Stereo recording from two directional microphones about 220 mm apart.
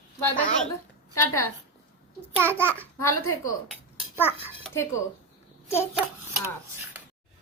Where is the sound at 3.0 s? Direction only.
80° left.